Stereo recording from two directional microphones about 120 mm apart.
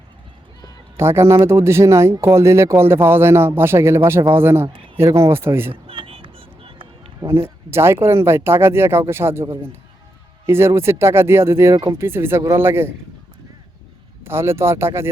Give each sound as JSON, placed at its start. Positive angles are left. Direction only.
{"t": 0.9, "sound": "speech", "side_deg": -20}
{"t": 5.9, "sound": "vehicle", "side_deg": -50}
{"t": 7.2, "sound": "speech", "side_deg": -20}
{"t": 14.3, "sound": "speech", "side_deg": -20}